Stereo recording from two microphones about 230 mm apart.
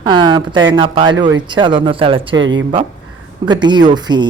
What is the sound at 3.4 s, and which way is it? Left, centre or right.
Speech, centre.